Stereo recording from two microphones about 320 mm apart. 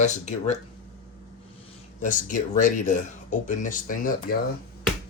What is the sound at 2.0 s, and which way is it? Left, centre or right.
Speech, left.